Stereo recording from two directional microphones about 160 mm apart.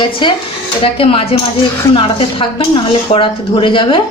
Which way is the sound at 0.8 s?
35° left (ahead or behind).